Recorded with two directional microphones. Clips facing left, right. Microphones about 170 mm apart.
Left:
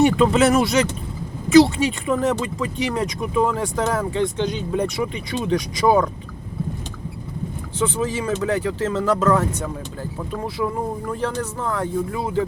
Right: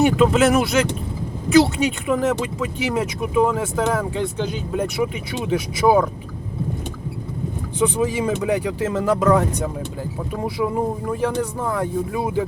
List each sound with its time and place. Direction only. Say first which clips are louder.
0.0 s speech: even; centre (ahead or behind)
7.8 s speech: right 3 dB; 15° right (ahead or behind)